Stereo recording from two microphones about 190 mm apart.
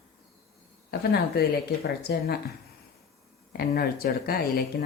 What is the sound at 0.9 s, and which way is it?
Speech, 55° left (ahead or behind).